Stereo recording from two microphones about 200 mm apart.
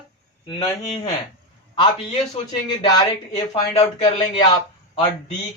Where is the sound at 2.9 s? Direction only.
20° left (ahead or behind).